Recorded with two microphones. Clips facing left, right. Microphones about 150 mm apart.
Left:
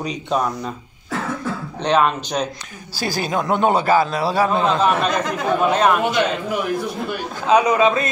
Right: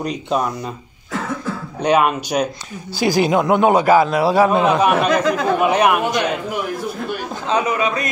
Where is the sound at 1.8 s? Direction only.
10° right (ahead or behind).